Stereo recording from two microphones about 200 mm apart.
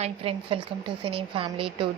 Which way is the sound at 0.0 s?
30° right (ahead or behind).